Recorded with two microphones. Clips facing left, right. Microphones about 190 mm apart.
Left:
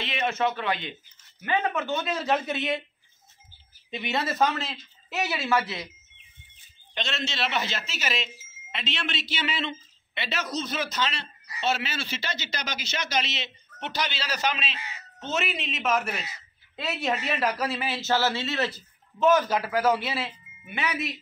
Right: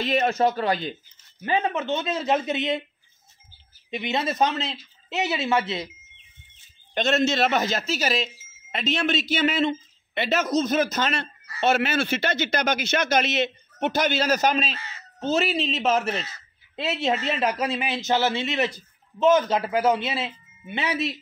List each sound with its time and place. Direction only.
0.0 s a man's voice: 40° right (ahead or behind)
1.4 s speech: 25° right (ahead or behind)
3.9 s speech: 20° right (ahead or behind)
6.9 s a man's voice: 45° right (ahead or behind); by 21.2 s 25° right (ahead or behind)